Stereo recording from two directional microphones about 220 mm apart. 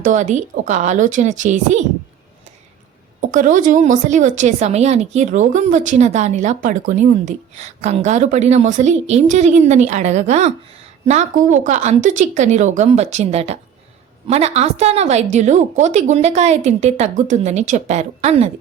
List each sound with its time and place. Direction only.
0.1 s a woman's voice: 35° right (ahead or behind)
3.2 s a woman's voice: 35° right (ahead or behind)